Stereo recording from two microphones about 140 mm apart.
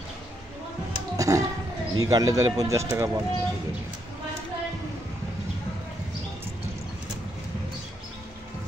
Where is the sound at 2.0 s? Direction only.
25° right (ahead or behind).